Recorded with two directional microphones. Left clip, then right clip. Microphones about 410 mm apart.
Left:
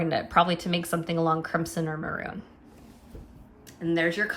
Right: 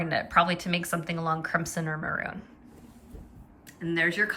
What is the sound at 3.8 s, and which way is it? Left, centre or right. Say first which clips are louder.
Speech: even; centre.